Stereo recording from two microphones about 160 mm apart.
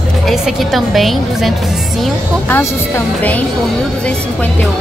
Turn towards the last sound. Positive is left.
turn(degrees=10)  # may be behind; listen again after turning